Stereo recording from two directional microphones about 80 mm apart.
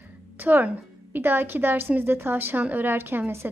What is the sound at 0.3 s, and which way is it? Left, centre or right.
A woman's voice, right.